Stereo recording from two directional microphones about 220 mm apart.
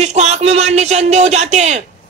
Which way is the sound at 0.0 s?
30° right (ahead or behind).